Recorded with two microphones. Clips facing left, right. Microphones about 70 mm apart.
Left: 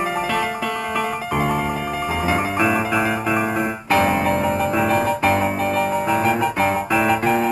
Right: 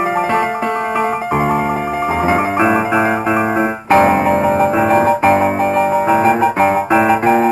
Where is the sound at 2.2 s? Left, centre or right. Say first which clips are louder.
Right 5 dB; right.